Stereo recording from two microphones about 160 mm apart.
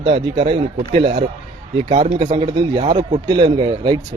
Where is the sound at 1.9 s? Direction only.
40° right (ahead or behind).